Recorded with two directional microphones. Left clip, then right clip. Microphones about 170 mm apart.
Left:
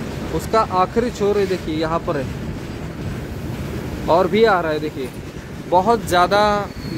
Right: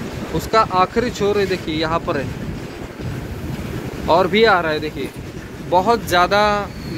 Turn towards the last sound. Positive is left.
turn(degrees=10)  # may be behind; listen again after turning